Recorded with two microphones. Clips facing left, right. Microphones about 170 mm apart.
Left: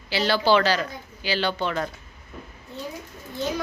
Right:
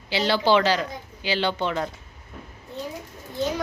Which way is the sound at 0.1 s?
20° right (ahead or behind).